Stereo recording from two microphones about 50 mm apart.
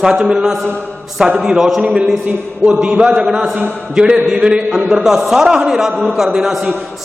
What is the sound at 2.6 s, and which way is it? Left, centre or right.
A man's voice, centre.